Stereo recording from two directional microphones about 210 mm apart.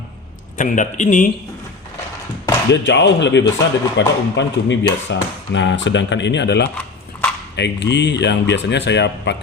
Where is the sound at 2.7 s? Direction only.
55° left (ahead or behind).